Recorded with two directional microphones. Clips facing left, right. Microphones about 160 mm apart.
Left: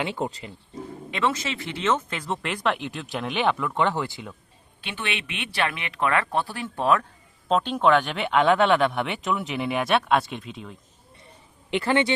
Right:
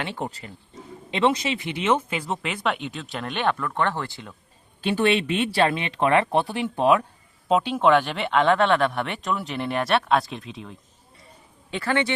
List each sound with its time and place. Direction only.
0.0 s speech: 20° left (ahead or behind)
1.1 s speech: 20° right (ahead or behind); by 4.4 s 10° left (ahead or behind)
4.8 s speech: 40° right (ahead or behind); by 10.8 s centre (ahead or behind)
11.8 s speech: 20° left (ahead or behind)